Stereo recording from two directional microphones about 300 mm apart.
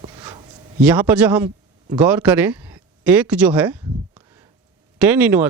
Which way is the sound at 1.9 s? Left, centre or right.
Centre.